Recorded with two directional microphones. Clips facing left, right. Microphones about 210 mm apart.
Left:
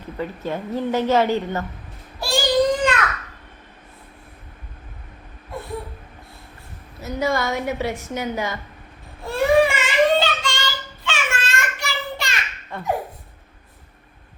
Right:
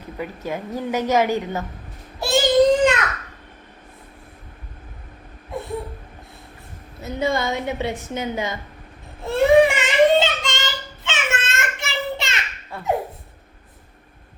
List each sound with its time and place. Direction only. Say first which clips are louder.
0.2 s a woman's voice: left 1 dB; 10° right (ahead or behind)
2.2 s child singing: right 3 dB; 20° right (ahead or behind)
7.0 s a woman's voice: even; 20° right (ahead or behind)
9.2 s child singing: right 3 dB; 20° right (ahead or behind)
12.7 s a sound: left 2 dB; 10° right (ahead or behind)